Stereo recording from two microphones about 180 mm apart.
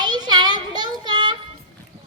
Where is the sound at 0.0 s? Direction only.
25° right (ahead or behind).